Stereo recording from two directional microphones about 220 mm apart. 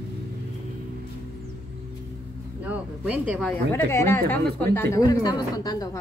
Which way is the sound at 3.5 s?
10° left (ahead or behind).